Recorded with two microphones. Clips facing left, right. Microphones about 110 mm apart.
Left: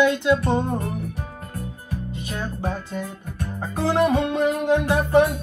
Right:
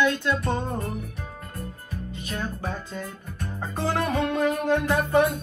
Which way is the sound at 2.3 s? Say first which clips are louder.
Left 3 dB; 15° left (ahead or behind).